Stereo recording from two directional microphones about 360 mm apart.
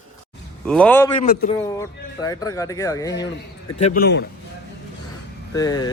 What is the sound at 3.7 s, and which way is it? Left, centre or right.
Speech, left.